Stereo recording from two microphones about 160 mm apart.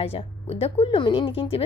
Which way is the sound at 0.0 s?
35° left (ahead or behind).